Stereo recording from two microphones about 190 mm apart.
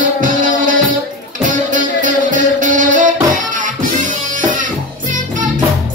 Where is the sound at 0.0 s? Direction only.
45° right (ahead or behind).